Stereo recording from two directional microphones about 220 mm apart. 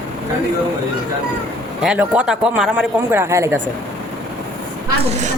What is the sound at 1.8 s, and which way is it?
A man's voice, 5° right (ahead or behind).